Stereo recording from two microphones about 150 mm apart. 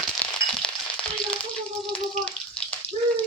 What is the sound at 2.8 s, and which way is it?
Water, 45° left (ahead or behind).